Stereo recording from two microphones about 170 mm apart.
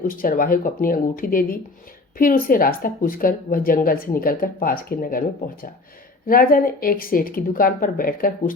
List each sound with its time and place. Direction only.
0.1 s speech: 55° left (ahead or behind)